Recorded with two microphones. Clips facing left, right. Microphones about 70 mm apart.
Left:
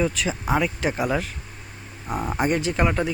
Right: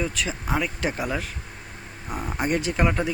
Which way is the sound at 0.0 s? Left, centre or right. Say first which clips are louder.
Left 4 dB; centre.